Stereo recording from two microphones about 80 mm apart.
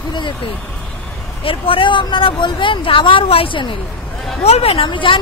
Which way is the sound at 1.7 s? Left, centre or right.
Left.